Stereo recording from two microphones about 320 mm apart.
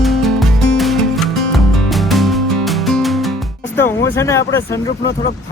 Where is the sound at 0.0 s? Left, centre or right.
Centre.